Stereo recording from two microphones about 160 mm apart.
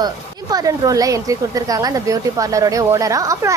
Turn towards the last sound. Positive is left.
turn(degrees=-20)  # may be behind; listen again after turning